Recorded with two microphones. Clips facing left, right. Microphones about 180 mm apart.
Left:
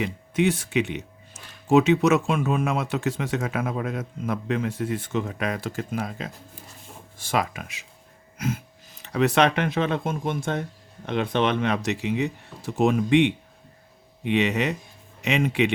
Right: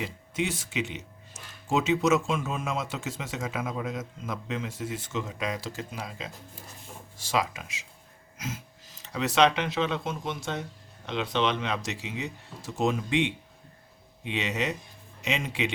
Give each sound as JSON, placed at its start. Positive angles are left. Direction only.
{"t": 0.0, "sound": "speech", "side_deg": 60}